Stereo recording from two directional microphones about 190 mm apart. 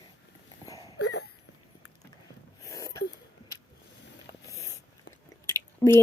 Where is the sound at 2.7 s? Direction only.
15° left (ahead or behind).